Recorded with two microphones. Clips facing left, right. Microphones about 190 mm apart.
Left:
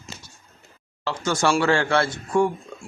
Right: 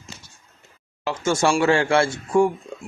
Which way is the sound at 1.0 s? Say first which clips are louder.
Right 2 dB; 25° right (ahead or behind).